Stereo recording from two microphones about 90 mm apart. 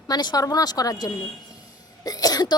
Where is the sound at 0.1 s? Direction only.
45° left (ahead or behind).